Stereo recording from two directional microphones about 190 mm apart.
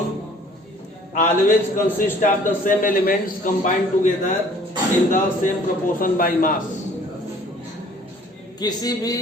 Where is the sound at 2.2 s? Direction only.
45° left (ahead or behind).